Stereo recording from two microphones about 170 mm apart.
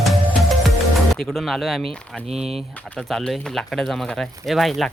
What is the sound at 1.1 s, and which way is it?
Speech, centre (ahead or behind).